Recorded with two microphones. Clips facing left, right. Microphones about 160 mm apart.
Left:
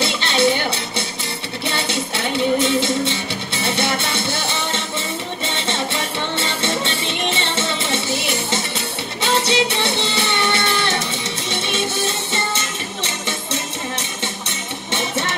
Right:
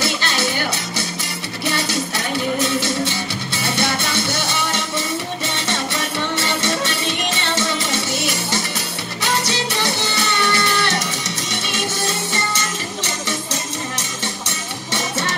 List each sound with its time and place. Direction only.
0.0 s music: 25° left (ahead or behind)
5.9 s music: 25° left (ahead or behind)